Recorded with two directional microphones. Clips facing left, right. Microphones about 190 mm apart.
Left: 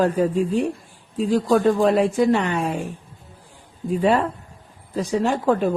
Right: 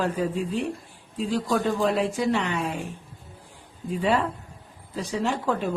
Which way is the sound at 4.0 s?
45° left (ahead or behind).